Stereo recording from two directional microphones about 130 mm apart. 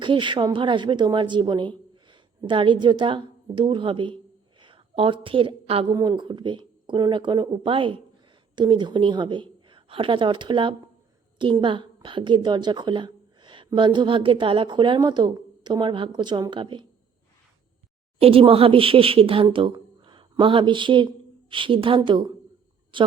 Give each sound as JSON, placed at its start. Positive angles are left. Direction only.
{"t": 0.0, "sound": "a woman's voice", "side_deg": -40}
{"t": 5.9, "sound": "a woman's voice", "side_deg": -30}
{"t": 18.2, "sound": "a woman's voice", "side_deg": -45}